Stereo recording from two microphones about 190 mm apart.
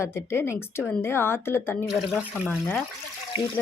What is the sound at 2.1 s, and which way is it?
Speech, 5° right (ahead or behind).